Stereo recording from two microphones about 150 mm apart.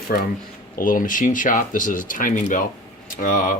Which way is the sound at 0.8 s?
65° left (ahead or behind).